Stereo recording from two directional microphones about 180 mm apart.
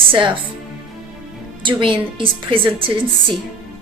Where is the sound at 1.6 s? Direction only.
30° right (ahead or behind).